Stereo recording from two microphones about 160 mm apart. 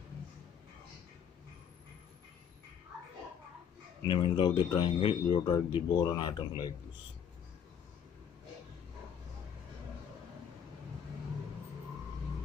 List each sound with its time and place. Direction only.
4.0 s speech: 30° left (ahead or behind)